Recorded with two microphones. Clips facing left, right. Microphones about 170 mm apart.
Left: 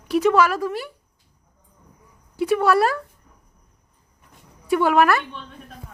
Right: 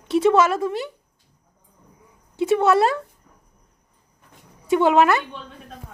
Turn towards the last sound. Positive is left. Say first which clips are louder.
# right 1 dB
turn(degrees=-20)  # may be behind; listen again after turning